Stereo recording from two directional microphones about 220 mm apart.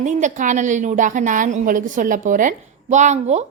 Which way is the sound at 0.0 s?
35° right (ahead or behind).